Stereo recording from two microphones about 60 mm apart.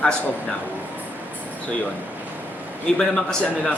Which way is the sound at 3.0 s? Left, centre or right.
Centre.